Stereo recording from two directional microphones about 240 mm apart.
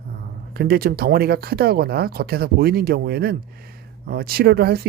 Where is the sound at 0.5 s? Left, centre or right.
Right.